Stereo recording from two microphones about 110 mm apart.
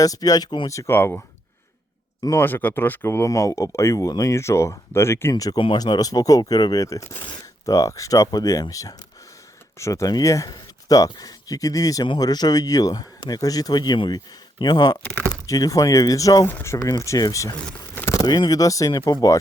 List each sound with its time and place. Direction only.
0.0 s speech: 35° left (ahead or behind)
0.7 s speech: 30° left (ahead or behind)
0.9 s speech: 20° left (ahead or behind)
2.2 s speech: 20° left (ahead or behind)
5.3 s speech: 35° left (ahead or behind)
16.5 s speech: 20° left (ahead or behind)
16.7 s speech: 30° left (ahead or behind)
17.9 s a sound: 20° left (ahead or behind)
18.2 s speech: 35° left (ahead or behind)